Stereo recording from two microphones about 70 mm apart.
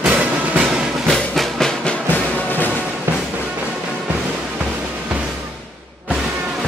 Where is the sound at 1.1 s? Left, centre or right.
Centre.